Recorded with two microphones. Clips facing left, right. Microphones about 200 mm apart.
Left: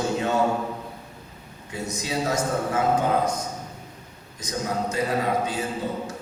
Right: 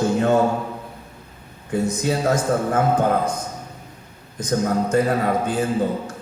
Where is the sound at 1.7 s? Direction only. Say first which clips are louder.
Right 8 dB; 50° right (ahead or behind).